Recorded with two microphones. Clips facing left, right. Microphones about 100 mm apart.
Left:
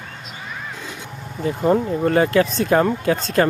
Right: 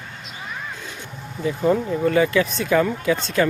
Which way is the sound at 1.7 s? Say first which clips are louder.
Left 2 dB; 40° left (ahead or behind).